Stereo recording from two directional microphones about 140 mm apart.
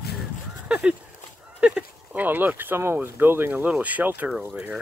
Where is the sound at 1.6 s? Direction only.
10° right (ahead or behind).